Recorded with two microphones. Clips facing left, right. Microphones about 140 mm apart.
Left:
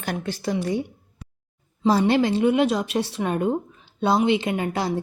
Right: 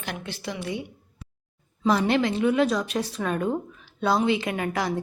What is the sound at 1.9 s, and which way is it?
A woman's voice, 30° left (ahead or behind).